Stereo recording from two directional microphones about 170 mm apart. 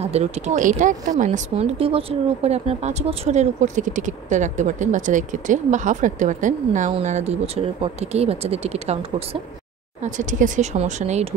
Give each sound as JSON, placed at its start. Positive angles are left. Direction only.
{"t": 0.0, "sound": "speech", "side_deg": -40}
{"t": 10.0, "sound": "speech", "side_deg": -50}